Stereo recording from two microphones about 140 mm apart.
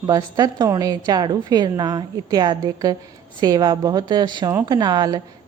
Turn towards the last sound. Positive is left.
turn(degrees=-30)  # may be behind; listen again after turning